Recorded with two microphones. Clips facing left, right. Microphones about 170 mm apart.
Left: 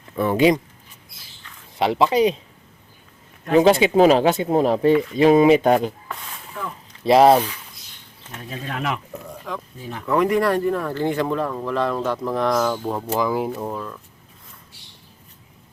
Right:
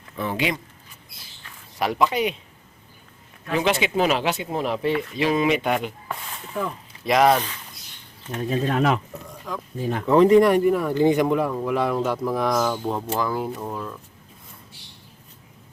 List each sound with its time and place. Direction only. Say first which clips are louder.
0.2 s speech: left 7 dB; 50° left (ahead or behind)
1.8 s a woman's voice: left 5 dB; 25° left (ahead or behind)
3.4 s speech: left 8 dB; 40° left (ahead or behind)
7.0 s a woman's voice: left 5 dB; 30° left (ahead or behind)
8.4 s speech: right 6 dB; 35° right (ahead or behind)
9.5 s speech: left 1 dB; centre (ahead or behind)
10.1 s speech: right 4 dB; 25° right (ahead or behind); by 13.1 s centre (ahead or behind)
13.1 s speech: left 3 dB; 10° left (ahead or behind)
13.7 s speech: left 1 dB; 5° right (ahead or behind)